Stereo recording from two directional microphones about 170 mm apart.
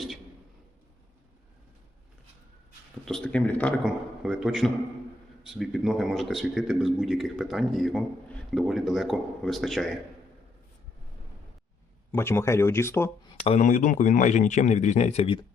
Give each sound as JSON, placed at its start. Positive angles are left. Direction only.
{"t": 3.1, "sound": "a man's voice", "side_deg": 5}
{"t": 12.1, "sound": "speech", "side_deg": 15}
{"t": 13.4, "sound": "speech", "side_deg": 40}